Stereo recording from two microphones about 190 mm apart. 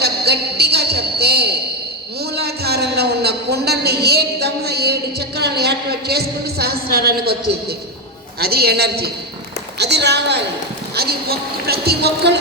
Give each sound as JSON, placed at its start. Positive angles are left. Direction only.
{"t": 0.0, "sound": "a sound", "side_deg": -60}
{"t": 5.4, "sound": "a woman's voice", "side_deg": -55}
{"t": 8.4, "sound": "a woman's voice", "side_deg": -55}